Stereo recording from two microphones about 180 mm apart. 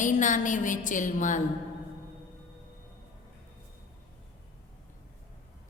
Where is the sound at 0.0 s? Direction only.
45° left (ahead or behind).